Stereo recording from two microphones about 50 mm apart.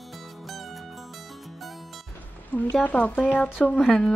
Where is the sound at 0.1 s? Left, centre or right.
Centre.